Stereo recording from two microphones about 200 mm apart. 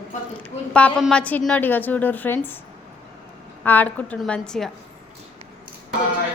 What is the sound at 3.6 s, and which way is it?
A woman's voice, 10° left (ahead or behind).